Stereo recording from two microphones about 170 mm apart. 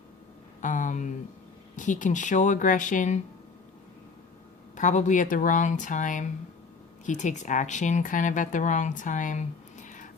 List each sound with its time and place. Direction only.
0.6 s speech: 50° left (ahead or behind)
4.7 s speech: 45° left (ahead or behind)